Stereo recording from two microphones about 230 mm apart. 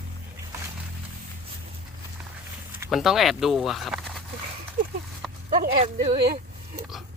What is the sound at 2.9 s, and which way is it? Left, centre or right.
Speech, centre.